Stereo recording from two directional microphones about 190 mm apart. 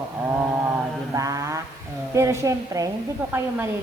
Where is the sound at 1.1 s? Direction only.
15° right (ahead or behind).